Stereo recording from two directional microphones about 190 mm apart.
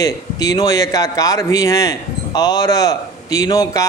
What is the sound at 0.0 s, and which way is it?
A man's voice, 20° left (ahead or behind).